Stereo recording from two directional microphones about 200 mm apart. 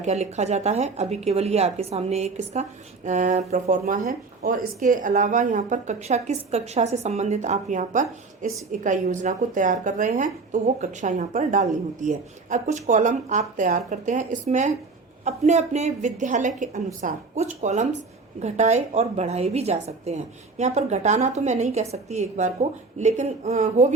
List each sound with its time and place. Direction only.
0.0 s a woman's voice: 35° right (ahead or behind)